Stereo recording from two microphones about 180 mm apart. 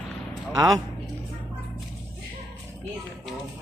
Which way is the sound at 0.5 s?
20° right (ahead or behind).